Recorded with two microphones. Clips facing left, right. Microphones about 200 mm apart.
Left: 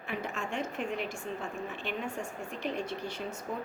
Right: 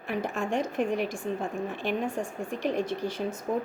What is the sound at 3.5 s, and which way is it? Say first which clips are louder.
Speech: right 9 dB; 45° right (ahead or behind).